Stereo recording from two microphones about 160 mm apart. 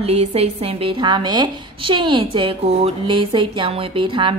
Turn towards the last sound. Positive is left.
turn(degrees=-30)  # may be behind; listen again after turning